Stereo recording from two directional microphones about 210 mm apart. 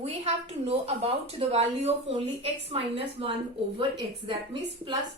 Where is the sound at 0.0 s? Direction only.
30° right (ahead or behind).